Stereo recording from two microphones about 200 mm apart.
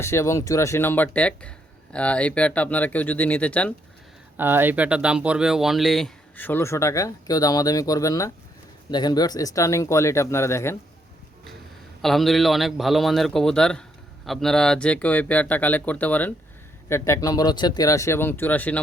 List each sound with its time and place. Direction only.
0.0 s speech: 15° left (ahead or behind)
4.4 s speech: 10° right (ahead or behind); by 10.8 s 15° left (ahead or behind)
12.0 s a man's voice: centre (ahead or behind)